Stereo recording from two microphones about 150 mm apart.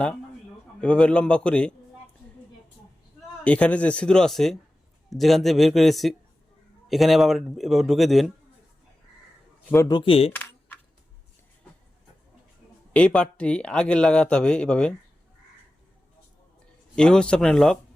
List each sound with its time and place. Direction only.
0.8 s speech: 5° left (ahead or behind)
3.4 s a man's voice: 10° left (ahead or behind)
9.9 s speech: 35° left (ahead or behind)
12.9 s speech: 5° left (ahead or behind)
16.9 s a man's voice: 5° left (ahead or behind)